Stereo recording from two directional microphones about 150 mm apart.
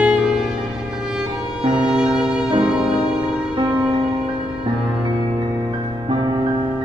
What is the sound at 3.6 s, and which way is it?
Music, 30° right (ahead or behind).